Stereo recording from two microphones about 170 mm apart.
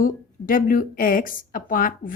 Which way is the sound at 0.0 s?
55° left (ahead or behind).